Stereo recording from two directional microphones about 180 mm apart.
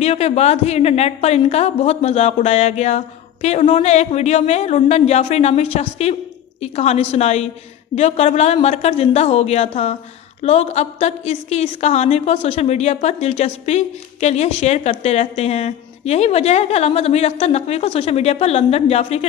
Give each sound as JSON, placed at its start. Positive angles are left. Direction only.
{"t": 0.0, "sound": "a woman's voice", "side_deg": 35}